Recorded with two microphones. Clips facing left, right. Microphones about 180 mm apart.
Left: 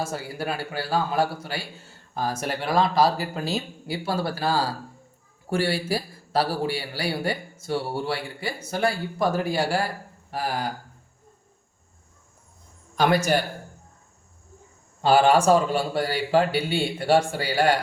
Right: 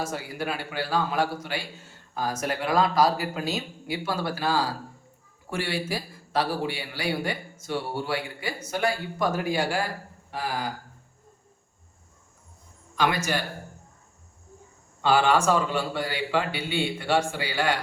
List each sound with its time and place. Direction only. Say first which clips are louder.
0.0 s a man's voice: left 1 dB; 30° left (ahead or behind)
15.0 s a man's voice: left 4 dB; 35° left (ahead or behind)